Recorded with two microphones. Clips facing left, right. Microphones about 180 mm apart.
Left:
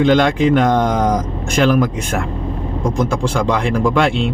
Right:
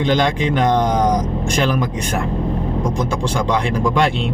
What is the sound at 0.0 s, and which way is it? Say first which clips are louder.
Speech: left 4 dB; centre (ahead or behind).